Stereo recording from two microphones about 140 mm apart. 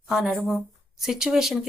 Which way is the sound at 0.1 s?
Centre (ahead or behind).